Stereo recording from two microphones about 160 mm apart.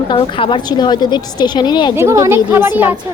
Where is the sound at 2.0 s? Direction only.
20° right (ahead or behind).